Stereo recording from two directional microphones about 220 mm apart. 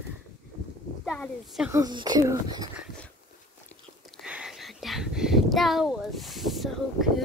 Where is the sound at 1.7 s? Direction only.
20° right (ahead or behind).